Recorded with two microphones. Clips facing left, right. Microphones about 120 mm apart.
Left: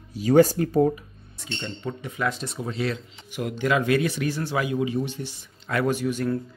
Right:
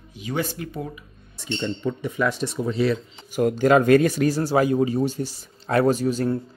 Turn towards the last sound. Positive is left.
turn(degrees=-30)  # may be behind; listen again after turning